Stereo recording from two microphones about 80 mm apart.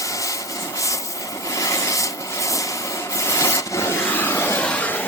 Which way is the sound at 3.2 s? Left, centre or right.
Left.